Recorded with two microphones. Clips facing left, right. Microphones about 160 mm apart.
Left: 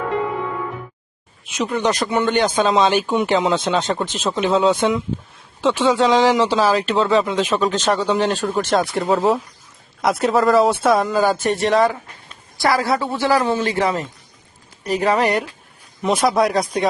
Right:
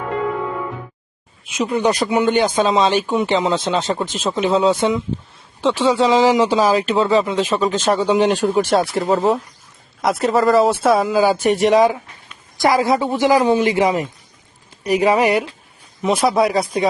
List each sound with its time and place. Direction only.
1.5 s speech: 5° right (ahead or behind)